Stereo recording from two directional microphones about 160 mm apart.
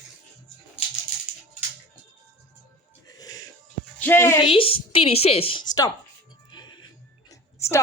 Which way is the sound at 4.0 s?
15° left (ahead or behind).